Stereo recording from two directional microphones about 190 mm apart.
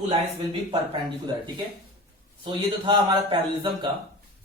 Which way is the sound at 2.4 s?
25° right (ahead or behind).